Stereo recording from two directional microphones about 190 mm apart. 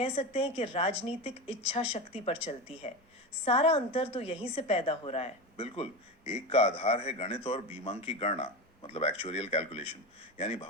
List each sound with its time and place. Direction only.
0.0 s a woman's voice: 30° left (ahead or behind)